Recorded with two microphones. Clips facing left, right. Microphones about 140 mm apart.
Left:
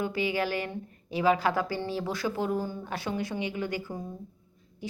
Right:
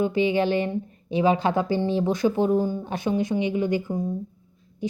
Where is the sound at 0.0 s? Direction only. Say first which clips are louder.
Right 7 dB; 20° right (ahead or behind).